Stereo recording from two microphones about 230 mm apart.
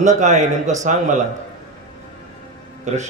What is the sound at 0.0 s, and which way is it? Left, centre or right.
A man's voice, right.